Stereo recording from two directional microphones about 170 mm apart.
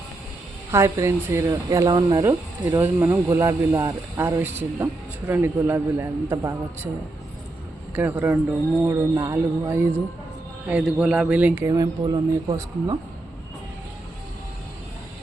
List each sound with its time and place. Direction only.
0.7 s speech: 15° right (ahead or behind)
2.6 s a man's voice: 10° right (ahead or behind)
7.9 s a man's voice: 10° right (ahead or behind)